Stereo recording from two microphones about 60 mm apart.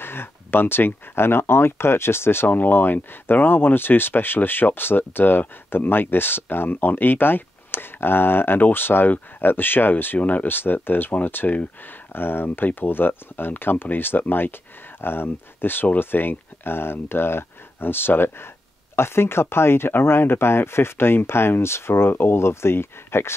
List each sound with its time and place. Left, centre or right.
0.0 s speech: left